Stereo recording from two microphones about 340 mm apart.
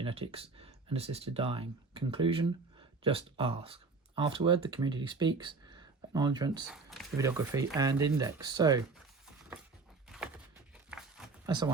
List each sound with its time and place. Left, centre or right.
0.0 s speech: centre
6.7 s speech: centre